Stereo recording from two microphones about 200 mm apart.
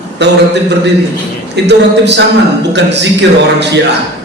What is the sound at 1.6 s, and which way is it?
A man's voice, 60° right (ahead or behind).